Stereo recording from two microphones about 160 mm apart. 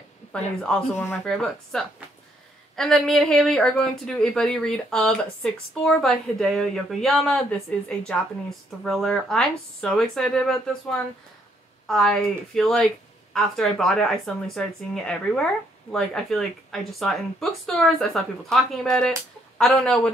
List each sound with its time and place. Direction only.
0.3 s a woman's voice: 5° left (ahead or behind)